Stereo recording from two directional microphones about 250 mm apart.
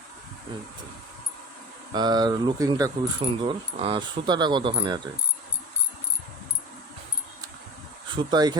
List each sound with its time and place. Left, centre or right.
1.9 s speech: centre
8.1 s speech: centre